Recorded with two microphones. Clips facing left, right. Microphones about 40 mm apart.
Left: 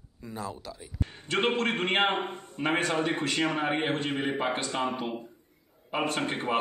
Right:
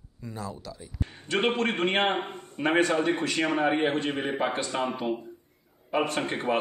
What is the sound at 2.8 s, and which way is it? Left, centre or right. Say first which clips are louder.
Speech: right 2 dB; left.